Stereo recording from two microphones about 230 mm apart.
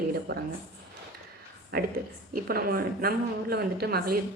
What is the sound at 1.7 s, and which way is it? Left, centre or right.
A woman's voice, right.